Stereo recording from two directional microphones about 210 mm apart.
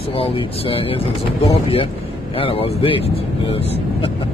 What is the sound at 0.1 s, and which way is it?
Speech, 25° left (ahead or behind).